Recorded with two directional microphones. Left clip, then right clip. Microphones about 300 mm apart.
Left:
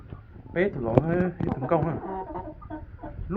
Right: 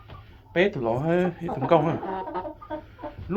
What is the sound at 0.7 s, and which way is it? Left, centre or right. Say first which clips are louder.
Speech: even; right.